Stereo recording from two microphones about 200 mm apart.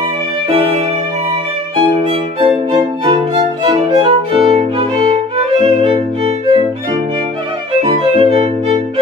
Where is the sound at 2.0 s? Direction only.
30° right (ahead or behind).